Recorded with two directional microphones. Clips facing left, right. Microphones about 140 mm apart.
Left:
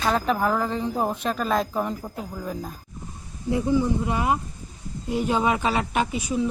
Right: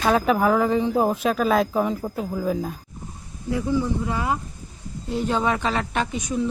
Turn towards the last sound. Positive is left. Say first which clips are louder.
# left 1 dB
turn(degrees=5)  # may be behind; listen again after turning